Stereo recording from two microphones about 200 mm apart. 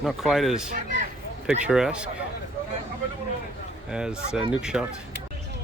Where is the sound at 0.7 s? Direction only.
40° right (ahead or behind).